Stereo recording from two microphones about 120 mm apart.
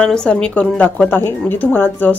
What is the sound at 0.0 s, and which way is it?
Speech, 5° left (ahead or behind).